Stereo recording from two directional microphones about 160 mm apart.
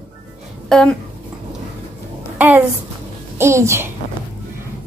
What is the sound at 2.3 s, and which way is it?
A child's voice, 15° right (ahead or behind).